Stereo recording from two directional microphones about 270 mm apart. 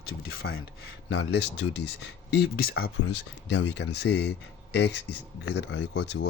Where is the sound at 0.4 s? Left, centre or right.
Left.